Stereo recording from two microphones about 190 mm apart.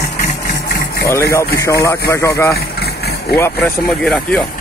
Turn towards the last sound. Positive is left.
turn(degrees=5)  # may be behind; listen again after turning